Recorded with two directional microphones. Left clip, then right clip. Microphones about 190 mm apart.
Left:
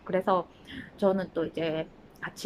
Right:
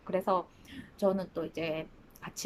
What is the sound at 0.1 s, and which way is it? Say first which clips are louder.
A woman's voice: left 4 dB; 10° right (ahead or behind).